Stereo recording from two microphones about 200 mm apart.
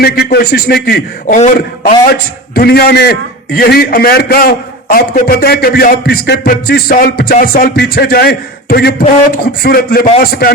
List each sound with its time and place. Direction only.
0.0 s a man's voice: 50° left (ahead or behind)
2.6 s a man's voice: 50° left (ahead or behind)